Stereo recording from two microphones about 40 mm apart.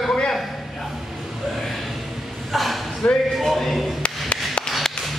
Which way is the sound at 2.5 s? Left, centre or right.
Centre.